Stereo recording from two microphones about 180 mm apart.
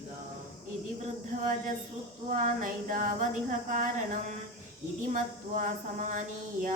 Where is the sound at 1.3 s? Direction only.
50° right (ahead or behind).